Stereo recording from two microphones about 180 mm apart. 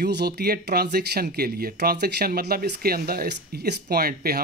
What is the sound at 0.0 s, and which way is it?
Speech, 65° right (ahead or behind).